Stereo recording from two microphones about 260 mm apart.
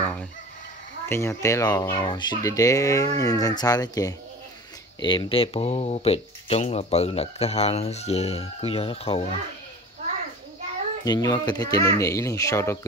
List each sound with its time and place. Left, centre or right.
0.0 s fowl: centre
1.0 s speech: centre
11.1 s speech: centre